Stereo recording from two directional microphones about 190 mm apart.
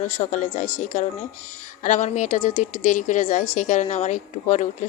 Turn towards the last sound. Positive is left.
turn(degrees=40)  # may be behind; listen again after turning